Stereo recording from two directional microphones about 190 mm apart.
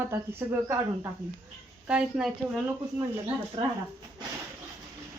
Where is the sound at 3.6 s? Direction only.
25° right (ahead or behind).